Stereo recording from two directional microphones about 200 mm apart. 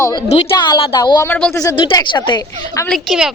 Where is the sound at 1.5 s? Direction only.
20° left (ahead or behind).